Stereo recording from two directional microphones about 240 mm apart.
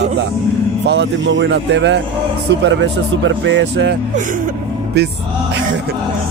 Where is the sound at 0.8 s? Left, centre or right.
Right.